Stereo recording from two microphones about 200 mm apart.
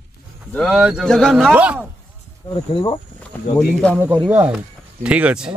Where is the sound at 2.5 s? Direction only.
25° left (ahead or behind).